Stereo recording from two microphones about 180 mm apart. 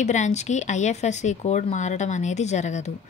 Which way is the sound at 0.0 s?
40° left (ahead or behind).